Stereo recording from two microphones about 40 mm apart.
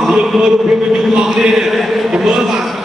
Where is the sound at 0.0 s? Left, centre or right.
Centre.